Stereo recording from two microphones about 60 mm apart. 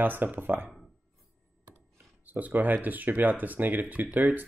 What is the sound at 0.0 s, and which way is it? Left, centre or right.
Speech, right.